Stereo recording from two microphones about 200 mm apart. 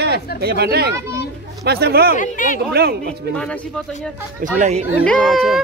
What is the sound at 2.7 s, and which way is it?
Speech, 50° right (ahead or behind).